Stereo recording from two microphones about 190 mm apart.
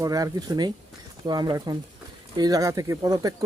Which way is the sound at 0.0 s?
20° right (ahead or behind).